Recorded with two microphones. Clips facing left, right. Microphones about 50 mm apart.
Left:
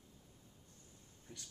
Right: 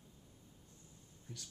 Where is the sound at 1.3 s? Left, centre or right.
Left.